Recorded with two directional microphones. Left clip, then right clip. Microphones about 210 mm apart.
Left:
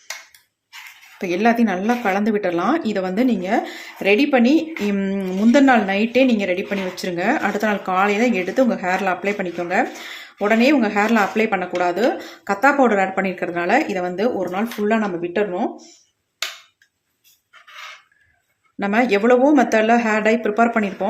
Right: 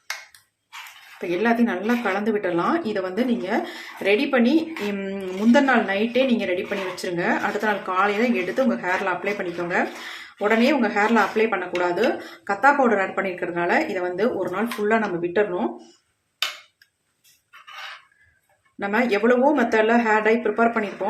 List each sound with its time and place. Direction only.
1.2 s speech: 40° left (ahead or behind)
18.8 s speech: 35° left (ahead or behind)